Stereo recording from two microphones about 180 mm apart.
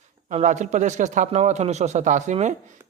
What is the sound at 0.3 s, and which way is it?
A man's voice, 40° right (ahead or behind).